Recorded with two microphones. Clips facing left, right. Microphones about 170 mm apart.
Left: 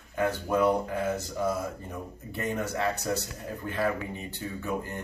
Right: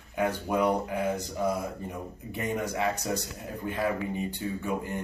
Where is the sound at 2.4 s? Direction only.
10° right (ahead or behind).